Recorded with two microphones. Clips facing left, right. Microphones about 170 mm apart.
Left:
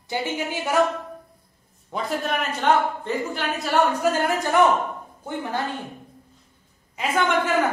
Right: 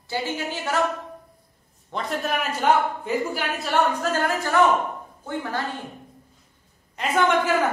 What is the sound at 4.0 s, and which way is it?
Speech, 15° left (ahead or behind).